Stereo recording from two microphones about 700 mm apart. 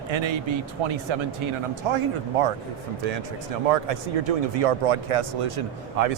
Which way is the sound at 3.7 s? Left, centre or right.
Right.